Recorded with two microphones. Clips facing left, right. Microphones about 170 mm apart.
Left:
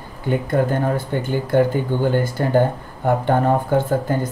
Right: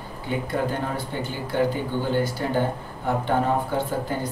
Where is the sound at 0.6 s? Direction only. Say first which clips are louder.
Left 7 dB; 50° left (ahead or behind).